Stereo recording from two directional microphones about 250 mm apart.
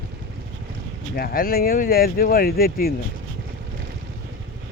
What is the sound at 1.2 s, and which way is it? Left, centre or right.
Speech, left.